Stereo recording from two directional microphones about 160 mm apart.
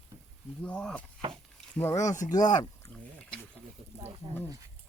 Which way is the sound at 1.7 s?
15° left (ahead or behind).